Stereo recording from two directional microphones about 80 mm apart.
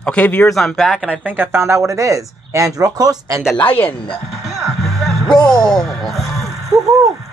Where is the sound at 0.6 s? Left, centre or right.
Centre.